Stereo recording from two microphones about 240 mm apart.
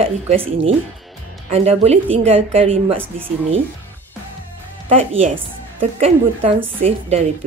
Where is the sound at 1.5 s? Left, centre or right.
Right.